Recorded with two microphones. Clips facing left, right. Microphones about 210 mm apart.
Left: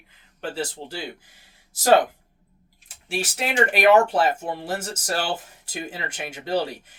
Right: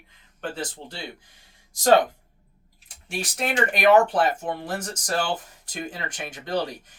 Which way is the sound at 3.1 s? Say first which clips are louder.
Left 1 dB; 5° left (ahead or behind).